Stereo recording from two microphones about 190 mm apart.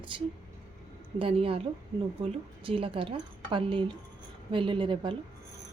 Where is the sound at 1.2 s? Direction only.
30° right (ahead or behind).